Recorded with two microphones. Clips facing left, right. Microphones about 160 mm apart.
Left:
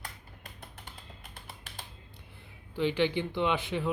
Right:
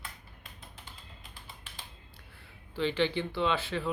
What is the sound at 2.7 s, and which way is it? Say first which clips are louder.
Speech: left 1 dB; 10° left (ahead or behind).